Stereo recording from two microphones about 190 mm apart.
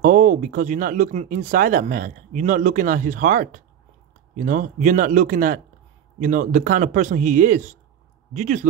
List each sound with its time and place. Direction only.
0.0 s speech: 45° right (ahead or behind)